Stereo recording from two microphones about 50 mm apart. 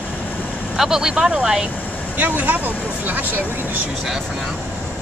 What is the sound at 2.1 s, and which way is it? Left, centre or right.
Speech, right.